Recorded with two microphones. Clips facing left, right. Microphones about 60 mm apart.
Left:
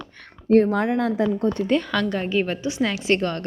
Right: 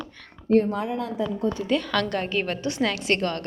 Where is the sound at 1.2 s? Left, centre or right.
Left.